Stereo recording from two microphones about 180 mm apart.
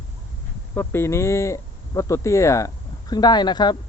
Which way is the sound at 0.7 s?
15° left (ahead or behind).